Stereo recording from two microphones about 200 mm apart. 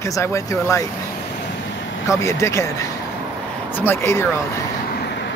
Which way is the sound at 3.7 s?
10° left (ahead or behind).